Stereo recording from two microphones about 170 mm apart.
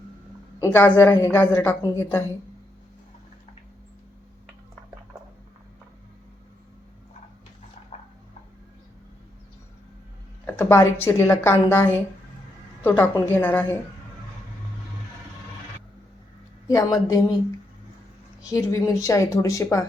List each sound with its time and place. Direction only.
0.6 s a woman's voice: 15° left (ahead or behind)
10.4 s a woman's voice: 10° left (ahead or behind)
13.0 s a woman's voice: 10° left (ahead or behind)
16.6 s speech: 20° left (ahead or behind)
18.5 s a woman's voice: 20° left (ahead or behind)